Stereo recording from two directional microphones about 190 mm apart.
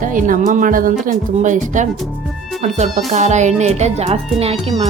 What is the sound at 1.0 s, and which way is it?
Music, 40° right (ahead or behind).